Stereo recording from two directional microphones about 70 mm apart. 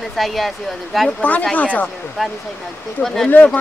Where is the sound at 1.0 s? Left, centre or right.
Centre.